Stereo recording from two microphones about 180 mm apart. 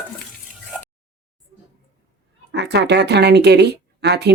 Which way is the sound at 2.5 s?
70° right (ahead or behind).